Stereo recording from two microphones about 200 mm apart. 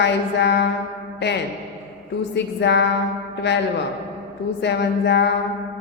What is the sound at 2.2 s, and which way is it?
Speech, 60° left (ahead or behind).